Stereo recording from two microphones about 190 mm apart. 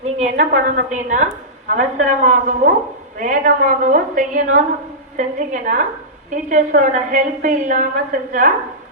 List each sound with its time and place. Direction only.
0.2 s a woman's voice: 40° right (ahead or behind)